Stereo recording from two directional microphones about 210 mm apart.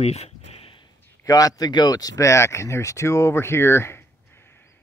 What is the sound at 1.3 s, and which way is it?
Speech, 15° left (ahead or behind).